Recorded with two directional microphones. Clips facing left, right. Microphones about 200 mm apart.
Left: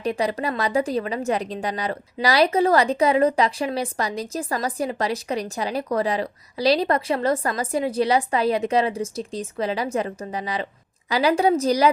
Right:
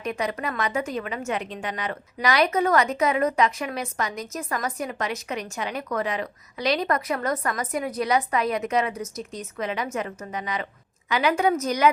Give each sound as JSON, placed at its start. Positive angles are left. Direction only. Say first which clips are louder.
{"t": 0.0, "sound": "a woman's voice", "louder": "left 4 dB", "side_deg": 30}